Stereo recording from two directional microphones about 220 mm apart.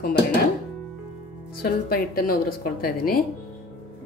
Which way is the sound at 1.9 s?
40° left (ahead or behind).